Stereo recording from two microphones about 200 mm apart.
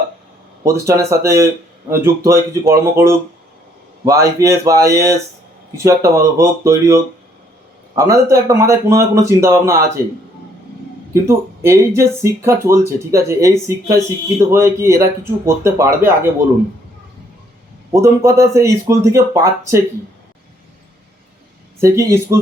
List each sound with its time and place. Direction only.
0.6 s speech: 15° right (ahead or behind)
11.1 s speech: 15° right (ahead or behind)
17.9 s speech: 15° right (ahead or behind)
21.8 s speech: 15° right (ahead or behind)